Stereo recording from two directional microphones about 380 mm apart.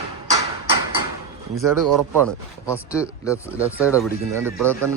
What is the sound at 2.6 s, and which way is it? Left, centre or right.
A man's voice, centre.